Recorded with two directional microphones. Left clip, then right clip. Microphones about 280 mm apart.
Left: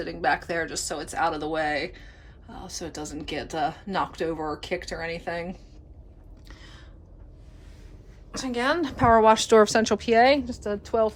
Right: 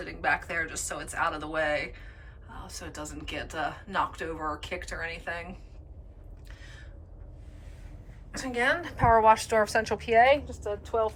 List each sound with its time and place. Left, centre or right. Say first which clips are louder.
0.0 s speech: left 3 dB; centre
6.5 s a sound: left 2 dB; centre
8.3 s a woman's voice: left 1 dB; centre
10.2 s a woman's voice: left 2 dB; left
10.5 s a woman's voice: left 4 dB; left